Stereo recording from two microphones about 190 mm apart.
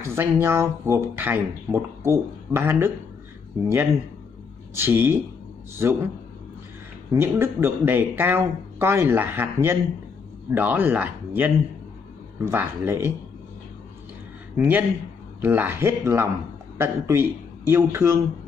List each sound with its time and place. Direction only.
0.0 s speech: 15° right (ahead or behind)
4.7 s speech: 10° right (ahead or behind)
7.1 s speech: 10° right (ahead or behind)
14.6 s a man's voice: 10° right (ahead or behind)